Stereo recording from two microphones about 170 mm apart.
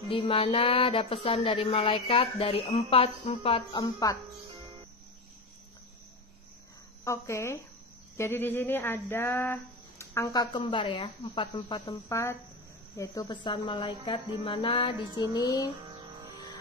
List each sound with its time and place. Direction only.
0.1 s speech: 30° left (ahead or behind)
7.1 s speech: 15° left (ahead or behind); by 15.0 s 35° left (ahead or behind)
15.1 s speech: 20° left (ahead or behind)